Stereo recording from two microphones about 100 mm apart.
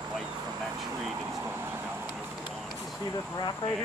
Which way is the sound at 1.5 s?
20° right (ahead or behind).